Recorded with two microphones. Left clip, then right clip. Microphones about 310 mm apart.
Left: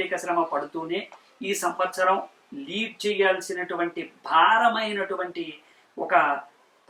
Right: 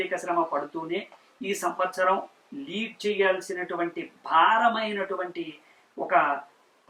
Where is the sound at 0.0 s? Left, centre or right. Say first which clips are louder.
Left 1 dB; centre.